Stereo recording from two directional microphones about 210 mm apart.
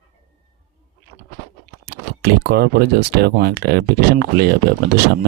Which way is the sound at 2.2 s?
50° right (ahead or behind).